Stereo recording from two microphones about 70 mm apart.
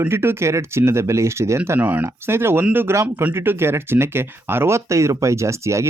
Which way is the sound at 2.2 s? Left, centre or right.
Right.